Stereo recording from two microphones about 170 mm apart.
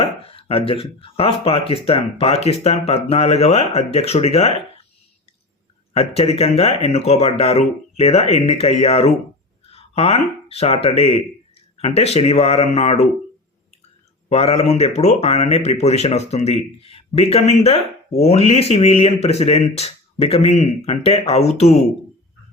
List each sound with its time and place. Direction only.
0.0 s speech: 35° left (ahead or behind)
5.9 s speech: 35° left (ahead or behind)
14.3 s speech: 35° left (ahead or behind)